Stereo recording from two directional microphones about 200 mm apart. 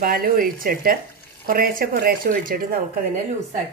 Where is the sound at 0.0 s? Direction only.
45° right (ahead or behind).